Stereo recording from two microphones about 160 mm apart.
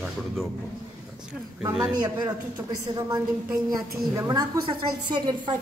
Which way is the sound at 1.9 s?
25° right (ahead or behind).